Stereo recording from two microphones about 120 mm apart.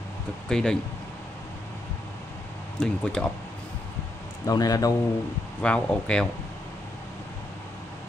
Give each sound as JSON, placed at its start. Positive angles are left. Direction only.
{"t": 0.5, "sound": "speech", "side_deg": 5}
{"t": 2.8, "sound": "speech", "side_deg": 5}
{"t": 4.5, "sound": "a man's voice", "side_deg": 30}
{"t": 5.6, "sound": "speech", "side_deg": 10}